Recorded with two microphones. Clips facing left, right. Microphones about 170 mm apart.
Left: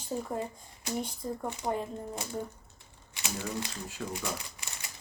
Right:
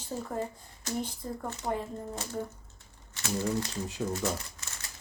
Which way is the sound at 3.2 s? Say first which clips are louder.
Right 5 dB; 15° left (ahead or behind).